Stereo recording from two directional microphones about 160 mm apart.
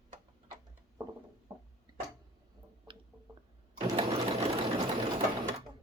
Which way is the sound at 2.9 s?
30° right (ahead or behind).